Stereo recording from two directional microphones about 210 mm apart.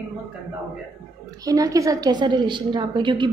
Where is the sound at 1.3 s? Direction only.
15° right (ahead or behind).